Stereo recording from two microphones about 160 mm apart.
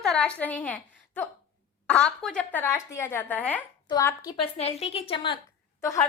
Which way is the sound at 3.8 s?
20° left (ahead or behind).